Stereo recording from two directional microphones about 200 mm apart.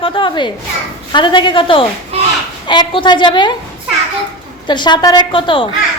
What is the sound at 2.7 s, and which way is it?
Speech, 25° left (ahead or behind).